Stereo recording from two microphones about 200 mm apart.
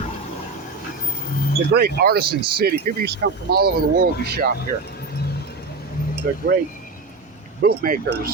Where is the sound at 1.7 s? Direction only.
50° right (ahead or behind).